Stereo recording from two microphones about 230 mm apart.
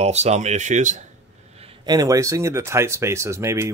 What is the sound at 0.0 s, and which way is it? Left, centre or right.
Speech, right.